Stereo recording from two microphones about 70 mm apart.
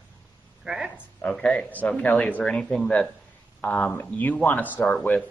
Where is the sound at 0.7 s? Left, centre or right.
Centre.